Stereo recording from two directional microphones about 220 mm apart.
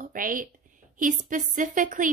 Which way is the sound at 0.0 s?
40° right (ahead or behind).